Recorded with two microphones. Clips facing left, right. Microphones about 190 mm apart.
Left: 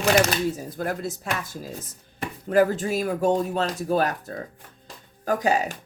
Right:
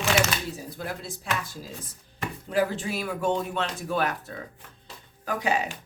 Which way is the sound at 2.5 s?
45° left (ahead or behind).